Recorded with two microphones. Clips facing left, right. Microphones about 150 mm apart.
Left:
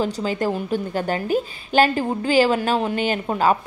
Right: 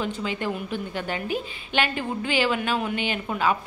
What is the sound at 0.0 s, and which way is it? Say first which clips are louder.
A woman's voice: left 6 dB; 40° left (ahead or behind).